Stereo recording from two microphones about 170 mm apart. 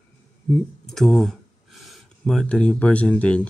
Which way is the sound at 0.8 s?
5° left (ahead or behind).